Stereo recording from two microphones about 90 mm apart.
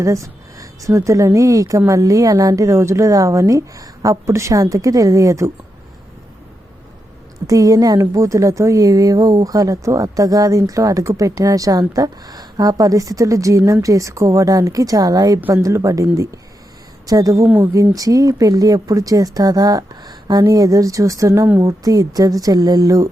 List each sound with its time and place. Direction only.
0.0 s a woman's voice: 35° right (ahead or behind)
7.4 s a woman's voice: 40° right (ahead or behind)
17.1 s a woman's voice: 40° right (ahead or behind)
17.4 s speech: 25° right (ahead or behind)
17.9 s a woman's voice: 40° right (ahead or behind)